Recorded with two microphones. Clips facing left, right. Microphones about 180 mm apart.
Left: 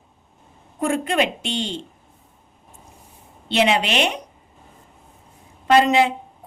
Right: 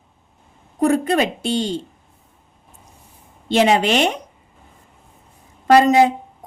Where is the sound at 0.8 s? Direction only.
40° right (ahead or behind).